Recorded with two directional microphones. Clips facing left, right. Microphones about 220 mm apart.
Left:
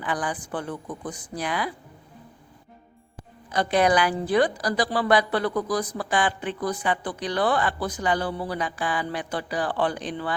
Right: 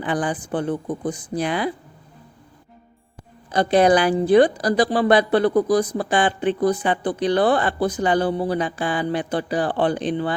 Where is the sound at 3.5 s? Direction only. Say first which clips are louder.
Right 5 dB; 30° right (ahead or behind).